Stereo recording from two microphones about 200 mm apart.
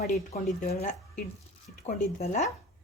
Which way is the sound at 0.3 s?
30° left (ahead or behind).